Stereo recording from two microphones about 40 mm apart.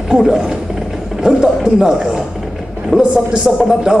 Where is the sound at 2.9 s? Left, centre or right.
Left.